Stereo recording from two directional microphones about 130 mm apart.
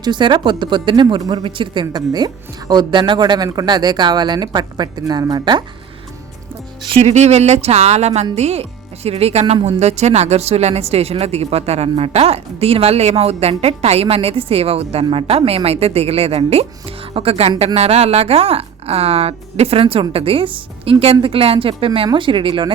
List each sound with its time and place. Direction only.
0.0 s speech: 35° right (ahead or behind)
7.0 s a woman's voice: 60° right (ahead or behind); by 22.7 s 40° right (ahead or behind)